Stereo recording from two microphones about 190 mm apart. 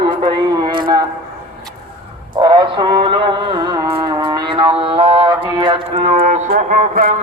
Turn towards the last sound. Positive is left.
turn(degrees=-40)  # may be behind; listen again after turning